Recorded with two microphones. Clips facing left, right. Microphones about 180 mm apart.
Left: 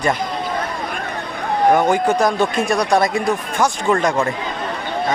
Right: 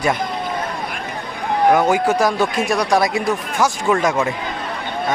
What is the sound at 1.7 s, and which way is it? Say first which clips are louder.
Speech: even; 5° right (ahead or behind).